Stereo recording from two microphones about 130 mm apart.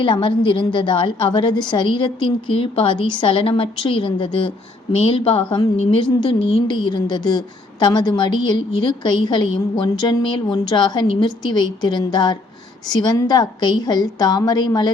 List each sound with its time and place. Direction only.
0.0 s a woman's voice: 40° left (ahead or behind)